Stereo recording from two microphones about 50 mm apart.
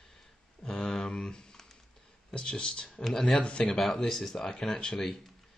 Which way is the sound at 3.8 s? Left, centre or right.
Centre.